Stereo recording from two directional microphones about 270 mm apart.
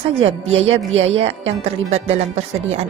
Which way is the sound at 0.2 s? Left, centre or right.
Right.